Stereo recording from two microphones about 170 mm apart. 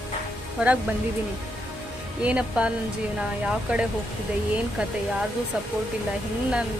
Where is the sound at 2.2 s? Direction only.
5° right (ahead or behind).